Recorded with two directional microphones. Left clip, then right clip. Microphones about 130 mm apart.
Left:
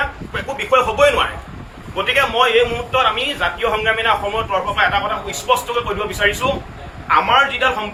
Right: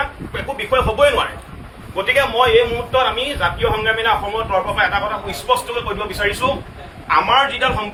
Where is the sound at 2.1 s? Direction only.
5° right (ahead or behind).